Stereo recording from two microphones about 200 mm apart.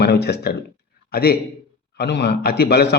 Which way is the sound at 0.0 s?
55° left (ahead or behind).